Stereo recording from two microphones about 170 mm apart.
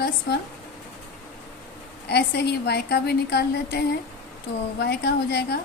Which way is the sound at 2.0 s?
80° left.